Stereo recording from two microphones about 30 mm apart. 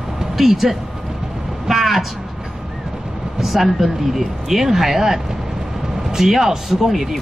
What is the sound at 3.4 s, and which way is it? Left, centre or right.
Speech, centre.